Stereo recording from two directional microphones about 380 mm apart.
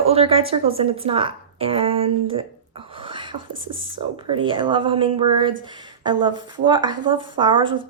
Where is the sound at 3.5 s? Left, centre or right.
Right.